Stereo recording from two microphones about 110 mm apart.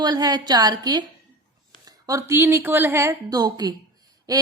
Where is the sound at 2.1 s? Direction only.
25° right (ahead or behind).